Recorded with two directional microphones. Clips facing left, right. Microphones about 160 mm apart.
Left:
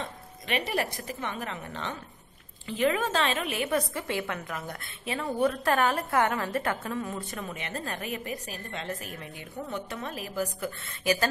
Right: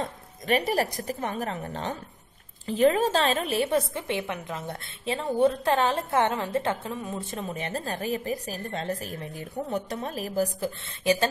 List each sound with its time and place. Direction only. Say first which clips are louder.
0.0 s a woman's voice: right 5 dB; 40° right (ahead or behind)